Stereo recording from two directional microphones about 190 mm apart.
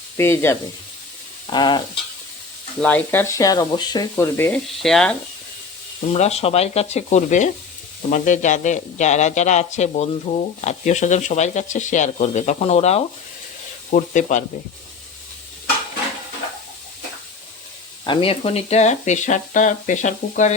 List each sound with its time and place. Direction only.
0.2 s speech: 15° left (ahead or behind)
1.5 s a sound: 25° left (ahead or behind)
2.8 s speech: 10° left (ahead or behind)
6.1 s speech: 35° left (ahead or behind)
18.0 s speech: 25° left (ahead or behind)